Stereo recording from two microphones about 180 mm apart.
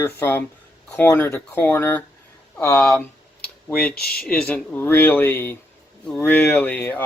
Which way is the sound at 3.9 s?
60° left (ahead or behind).